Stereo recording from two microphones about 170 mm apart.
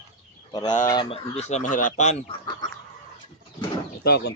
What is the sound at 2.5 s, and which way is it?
Fowl, 20° left (ahead or behind).